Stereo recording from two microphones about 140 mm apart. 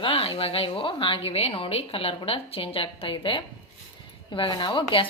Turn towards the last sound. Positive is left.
turn(degrees=35)  # may be behind; listen again after turning